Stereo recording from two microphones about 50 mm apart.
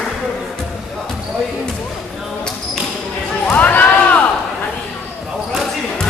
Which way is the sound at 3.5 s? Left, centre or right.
Left.